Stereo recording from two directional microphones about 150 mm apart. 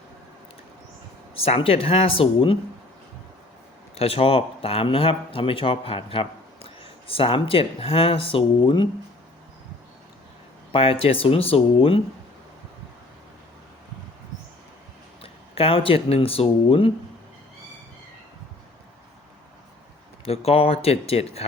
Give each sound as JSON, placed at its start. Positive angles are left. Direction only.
{"t": 1.4, "sound": "speech", "side_deg": 40}
{"t": 3.9, "sound": "speech", "side_deg": 40}
{"t": 10.7, "sound": "speech", "side_deg": 40}
{"t": 15.2, "sound": "speech", "side_deg": 40}
{"t": 20.2, "sound": "speech", "side_deg": 40}